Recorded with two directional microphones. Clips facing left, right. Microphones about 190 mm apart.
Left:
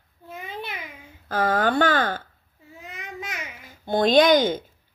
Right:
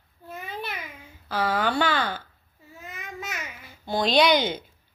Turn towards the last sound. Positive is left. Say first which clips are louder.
# left 4 dB
turn(degrees=45)  # may be behind; listen again after turning